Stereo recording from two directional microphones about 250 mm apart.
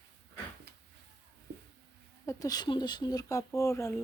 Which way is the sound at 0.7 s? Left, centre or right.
Right.